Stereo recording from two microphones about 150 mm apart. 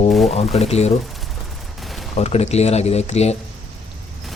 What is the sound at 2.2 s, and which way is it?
Speech, 45° left (ahead or behind).